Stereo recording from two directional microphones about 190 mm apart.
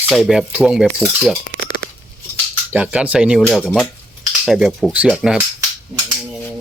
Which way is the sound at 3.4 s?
Centre (ahead or behind).